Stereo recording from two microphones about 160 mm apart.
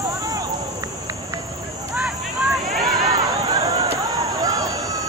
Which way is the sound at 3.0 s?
25° right (ahead or behind).